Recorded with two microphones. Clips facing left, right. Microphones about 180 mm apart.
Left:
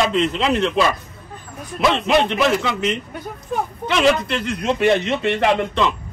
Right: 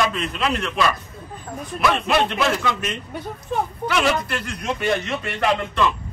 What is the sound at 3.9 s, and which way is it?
Speech, 20° left (ahead or behind).